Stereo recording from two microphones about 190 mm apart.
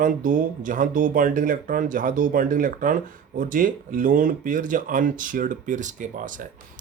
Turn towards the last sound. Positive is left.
turn(degrees=-45)  # may be behind; listen again after turning